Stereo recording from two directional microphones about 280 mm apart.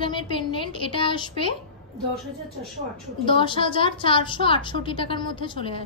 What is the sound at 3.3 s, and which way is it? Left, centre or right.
A woman's voice, centre.